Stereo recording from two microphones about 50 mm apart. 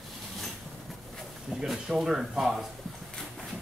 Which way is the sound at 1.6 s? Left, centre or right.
Centre.